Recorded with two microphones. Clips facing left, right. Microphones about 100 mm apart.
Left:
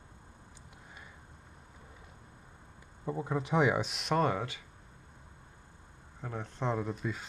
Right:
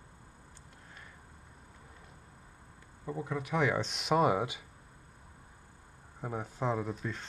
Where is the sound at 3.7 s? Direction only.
5° left (ahead or behind); by 4.6 s 15° right (ahead or behind).